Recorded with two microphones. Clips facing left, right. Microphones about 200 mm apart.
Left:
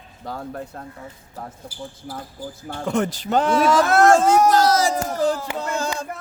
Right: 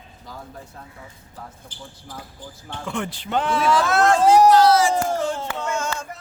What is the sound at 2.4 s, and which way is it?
Speech, 10° left (ahead or behind).